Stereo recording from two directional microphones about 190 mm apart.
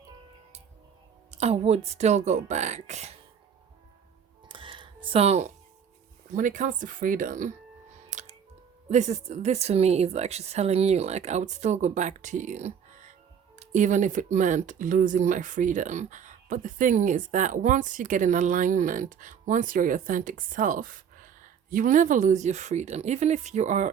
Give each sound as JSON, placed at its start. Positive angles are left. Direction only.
{"t": 1.3, "sound": "speech", "side_deg": -35}
{"t": 4.4, "sound": "music", "side_deg": -25}
{"t": 6.3, "sound": "speech", "side_deg": -40}